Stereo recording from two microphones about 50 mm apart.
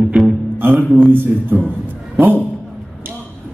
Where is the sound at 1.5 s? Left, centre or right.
Right.